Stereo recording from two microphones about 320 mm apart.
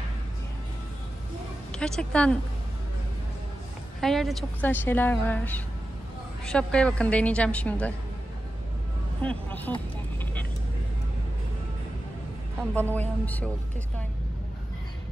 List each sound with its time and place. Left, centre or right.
1.7 s speech: centre
4.0 s a woman's voice: centre
9.2 s a woman's voice: centre
12.9 s a woman's voice: centre